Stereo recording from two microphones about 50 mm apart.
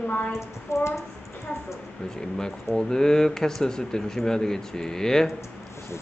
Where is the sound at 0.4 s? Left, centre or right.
Left.